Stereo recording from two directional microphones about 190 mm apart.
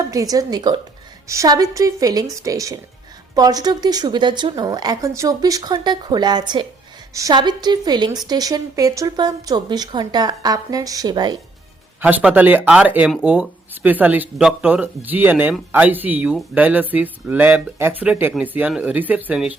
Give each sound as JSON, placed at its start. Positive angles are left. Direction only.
{"t": 0.0, "sound": "a woman's voice", "side_deg": -20}
{"t": 11.9, "sound": "speech", "side_deg": -10}